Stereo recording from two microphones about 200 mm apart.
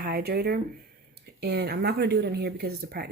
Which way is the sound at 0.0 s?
50° right (ahead or behind).